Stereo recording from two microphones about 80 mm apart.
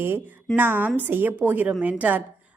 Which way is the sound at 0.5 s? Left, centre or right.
Right.